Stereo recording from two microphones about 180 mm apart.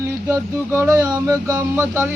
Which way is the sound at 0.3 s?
15° right (ahead or behind).